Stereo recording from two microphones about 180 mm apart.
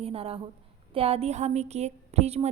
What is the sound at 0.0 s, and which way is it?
A woman's voice, 35° right (ahead or behind).